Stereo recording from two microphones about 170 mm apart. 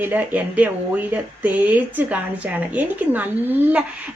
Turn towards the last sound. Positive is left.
turn(degrees=-10)  # may be behind; listen again after turning